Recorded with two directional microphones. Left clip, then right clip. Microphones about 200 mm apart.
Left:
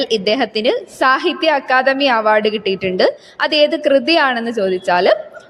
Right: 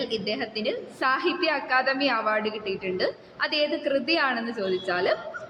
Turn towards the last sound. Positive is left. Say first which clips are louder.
# left 12 dB
turn(degrees=45)  # may be behind; listen again after turning